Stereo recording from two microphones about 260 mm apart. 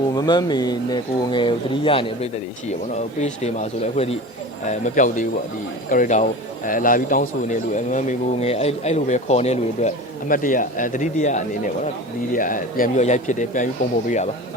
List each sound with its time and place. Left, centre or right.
0.2 s speech: centre